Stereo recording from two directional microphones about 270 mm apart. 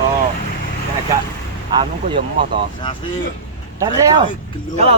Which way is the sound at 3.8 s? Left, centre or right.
Centre.